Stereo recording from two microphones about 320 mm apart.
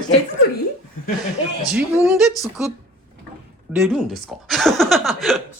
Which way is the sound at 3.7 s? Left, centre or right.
Centre.